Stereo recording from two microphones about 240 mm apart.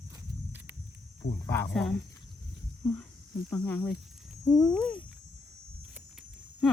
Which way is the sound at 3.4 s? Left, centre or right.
Centre.